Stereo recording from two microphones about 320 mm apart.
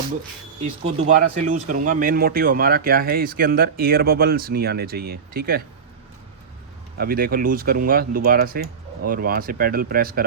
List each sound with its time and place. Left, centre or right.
1.0 s speech: right
7.0 s speech: right